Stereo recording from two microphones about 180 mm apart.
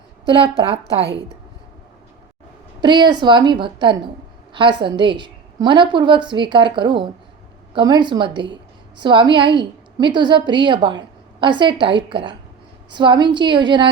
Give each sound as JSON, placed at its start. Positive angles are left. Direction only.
{"t": 0.3, "sound": "a woman's voice", "side_deg": -30}
{"t": 2.8, "sound": "a woman's voice", "side_deg": -25}